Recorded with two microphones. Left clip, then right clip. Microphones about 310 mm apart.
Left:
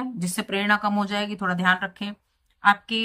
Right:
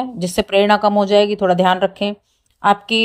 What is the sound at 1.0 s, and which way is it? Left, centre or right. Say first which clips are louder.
Speech: right 13 dB; centre.